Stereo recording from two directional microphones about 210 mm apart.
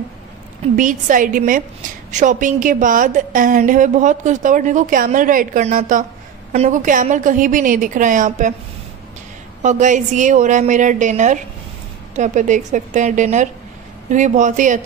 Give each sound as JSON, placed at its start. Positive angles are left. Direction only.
{"t": 0.7, "sound": "a woman's voice", "side_deg": -40}
{"t": 9.6, "sound": "a woman's voice", "side_deg": -35}